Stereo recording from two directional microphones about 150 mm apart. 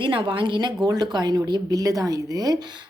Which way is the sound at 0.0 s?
35° right (ahead or behind).